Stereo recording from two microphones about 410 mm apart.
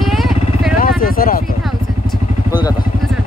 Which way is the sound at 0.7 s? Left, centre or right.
Left.